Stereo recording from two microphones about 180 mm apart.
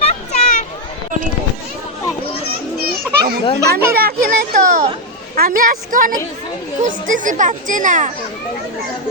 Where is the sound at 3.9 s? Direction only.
55° right (ahead or behind).